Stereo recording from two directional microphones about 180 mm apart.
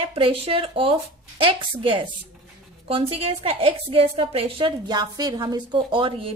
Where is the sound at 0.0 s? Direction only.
30° right (ahead or behind).